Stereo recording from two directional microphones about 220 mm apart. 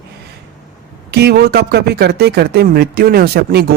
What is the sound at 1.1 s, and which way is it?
Speech, 45° right (ahead or behind).